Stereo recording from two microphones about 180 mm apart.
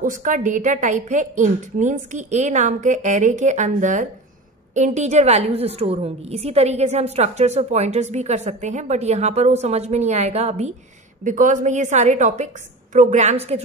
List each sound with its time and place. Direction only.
0.0 s a woman's voice: 45° right (ahead or behind)